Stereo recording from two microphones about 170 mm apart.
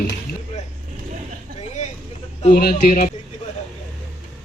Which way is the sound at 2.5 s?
60° left (ahead or behind).